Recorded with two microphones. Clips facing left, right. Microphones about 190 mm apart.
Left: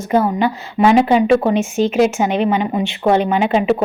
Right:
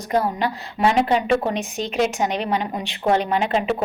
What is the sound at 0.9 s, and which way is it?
A woman's voice, 5° left (ahead or behind).